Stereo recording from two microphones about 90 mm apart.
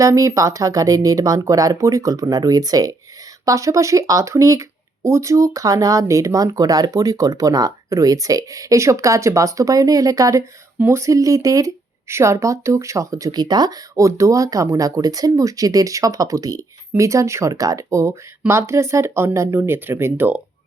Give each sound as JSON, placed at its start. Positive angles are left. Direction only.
{"t": 0.0, "sound": "speech", "side_deg": -35}